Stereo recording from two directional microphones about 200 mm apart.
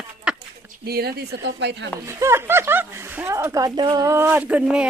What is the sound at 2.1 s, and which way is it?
A woman's voice, 15° right (ahead or behind).